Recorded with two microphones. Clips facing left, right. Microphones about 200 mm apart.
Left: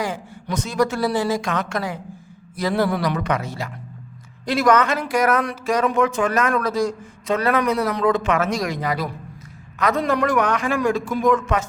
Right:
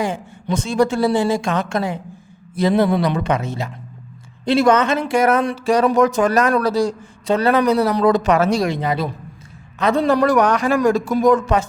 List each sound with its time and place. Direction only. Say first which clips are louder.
0.0 s speech: right 4 dB; 25° right (ahead or behind)